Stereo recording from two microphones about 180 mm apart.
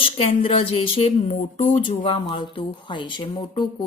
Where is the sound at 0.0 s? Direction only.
30° left (ahead or behind).